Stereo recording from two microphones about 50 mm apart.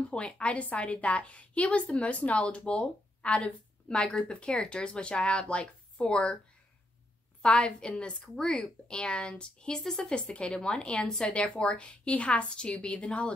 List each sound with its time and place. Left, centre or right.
0.1 s a woman's voice: left
7.4 s a woman's voice: centre
9.8 s speech: centre
10.1 s a woman's voice: centre